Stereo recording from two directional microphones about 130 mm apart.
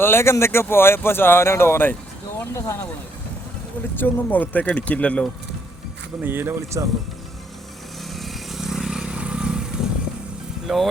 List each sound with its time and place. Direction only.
0.0 s speech: 20° left (ahead or behind)
3.9 s speech: 15° left (ahead or behind)
6.2 s speech: 15° right (ahead or behind)
8.1 s vehicle: centre (ahead or behind)
10.7 s speech: centre (ahead or behind)